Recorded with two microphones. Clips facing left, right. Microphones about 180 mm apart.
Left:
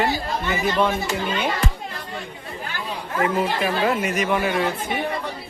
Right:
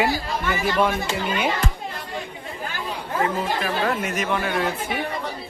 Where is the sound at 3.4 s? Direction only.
5° left (ahead or behind).